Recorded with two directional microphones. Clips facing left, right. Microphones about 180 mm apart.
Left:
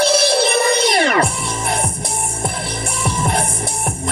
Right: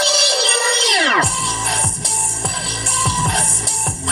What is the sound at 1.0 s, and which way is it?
Music, 50° left (ahead or behind).